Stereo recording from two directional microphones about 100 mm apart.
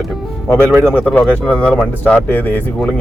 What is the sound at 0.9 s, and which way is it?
Speech, 15° left (ahead or behind).